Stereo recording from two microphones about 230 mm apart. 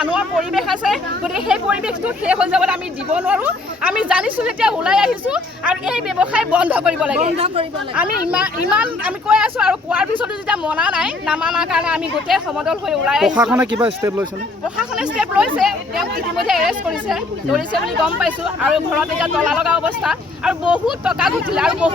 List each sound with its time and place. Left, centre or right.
0.0 s speech: centre
7.2 s speech: right
8.3 s speech: centre